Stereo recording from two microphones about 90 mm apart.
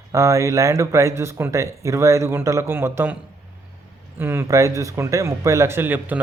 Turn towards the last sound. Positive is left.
turn(degrees=-20)  # may be behind; listen again after turning